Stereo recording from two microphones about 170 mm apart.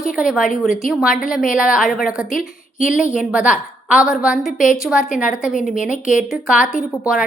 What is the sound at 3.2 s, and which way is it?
A woman's voice, 5° right (ahead or behind).